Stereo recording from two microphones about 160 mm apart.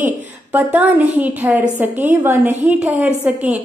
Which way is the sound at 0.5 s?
10° right (ahead or behind).